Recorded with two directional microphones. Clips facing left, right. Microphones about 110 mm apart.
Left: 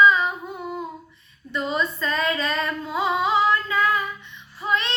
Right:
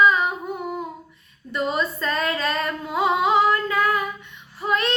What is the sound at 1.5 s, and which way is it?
Female singing, 45° right (ahead or behind).